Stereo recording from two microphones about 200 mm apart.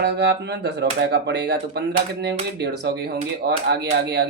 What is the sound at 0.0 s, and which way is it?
Speech, 55° right (ahead or behind).